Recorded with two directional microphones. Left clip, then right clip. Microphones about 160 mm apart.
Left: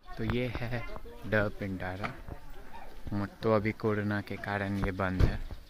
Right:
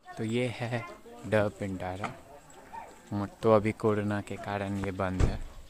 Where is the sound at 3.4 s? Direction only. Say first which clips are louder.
Right 4 dB; 25° right (ahead or behind); by 5.4 s 5° right (ahead or behind).